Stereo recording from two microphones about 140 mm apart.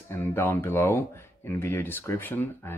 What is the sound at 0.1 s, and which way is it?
Speech, 15° left (ahead or behind).